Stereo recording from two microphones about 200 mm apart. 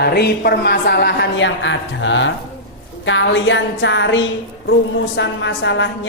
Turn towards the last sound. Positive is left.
turn(degrees=65)  # may be behind; listen again after turning